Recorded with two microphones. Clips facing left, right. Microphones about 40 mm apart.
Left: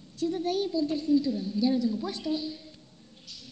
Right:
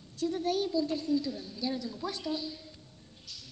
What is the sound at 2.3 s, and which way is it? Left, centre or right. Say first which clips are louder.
Speech: left 4 dB; centre.